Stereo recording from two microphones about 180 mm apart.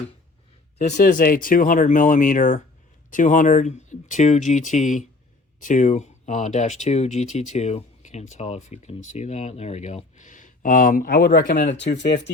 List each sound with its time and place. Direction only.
0.9 s speech: 55° left (ahead or behind)
11.8 s speech: 75° left (ahead or behind)